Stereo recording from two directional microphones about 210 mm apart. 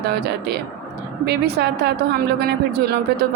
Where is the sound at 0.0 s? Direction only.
50° right (ahead or behind).